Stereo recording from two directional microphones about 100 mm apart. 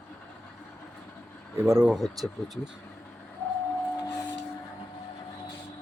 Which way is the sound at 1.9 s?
Centre (ahead or behind).